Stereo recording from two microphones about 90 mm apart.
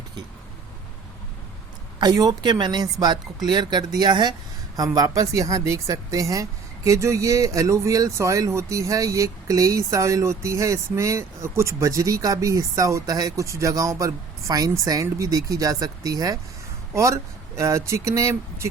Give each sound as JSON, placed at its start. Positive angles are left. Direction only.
{"t": 2.0, "sound": "speech", "side_deg": -45}
{"t": 4.9, "sound": "speech", "side_deg": -40}